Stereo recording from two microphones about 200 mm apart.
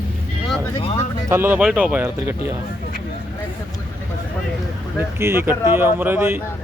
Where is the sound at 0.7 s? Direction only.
25° left (ahead or behind).